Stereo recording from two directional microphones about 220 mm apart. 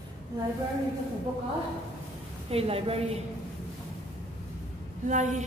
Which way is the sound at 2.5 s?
25° right (ahead or behind).